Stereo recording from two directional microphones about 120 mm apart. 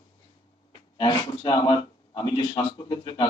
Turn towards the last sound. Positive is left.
turn(degrees=40)  # may be behind; listen again after turning